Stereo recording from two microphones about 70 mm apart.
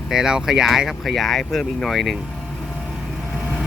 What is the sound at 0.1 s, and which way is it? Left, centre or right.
Speech, centre.